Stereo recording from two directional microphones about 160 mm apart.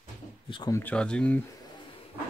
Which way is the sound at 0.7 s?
10° left (ahead or behind).